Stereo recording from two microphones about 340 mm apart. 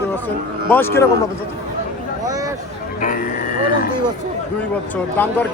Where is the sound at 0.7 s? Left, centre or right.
Centre.